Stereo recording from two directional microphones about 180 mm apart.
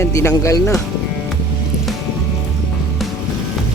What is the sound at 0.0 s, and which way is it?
Speech, 15° left (ahead or behind).